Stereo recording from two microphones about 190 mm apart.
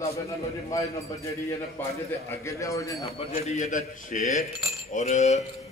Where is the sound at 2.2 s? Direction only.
15° left (ahead or behind).